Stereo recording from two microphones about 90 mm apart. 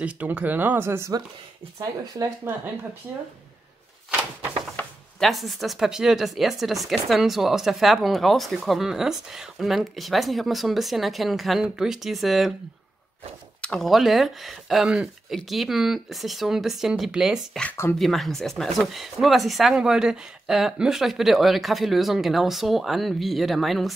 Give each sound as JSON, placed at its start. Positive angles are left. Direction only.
{"t": 0.0, "sound": "speech", "side_deg": -20}
{"t": 1.8, "sound": "speech", "side_deg": -40}
{"t": 5.2, "sound": "speech", "side_deg": 0}
{"t": 13.6, "sound": "speech", "side_deg": 5}